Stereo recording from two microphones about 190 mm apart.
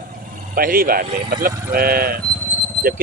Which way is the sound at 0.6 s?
50° right (ahead or behind).